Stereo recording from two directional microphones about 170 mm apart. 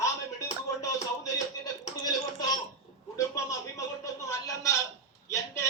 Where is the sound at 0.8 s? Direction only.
20° left (ahead or behind).